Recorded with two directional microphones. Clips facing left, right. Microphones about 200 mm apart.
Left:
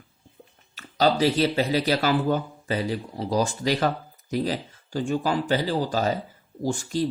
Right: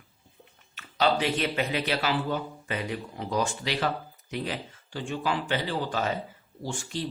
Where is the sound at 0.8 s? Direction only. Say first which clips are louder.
Left 4 dB; 40° left (ahead or behind).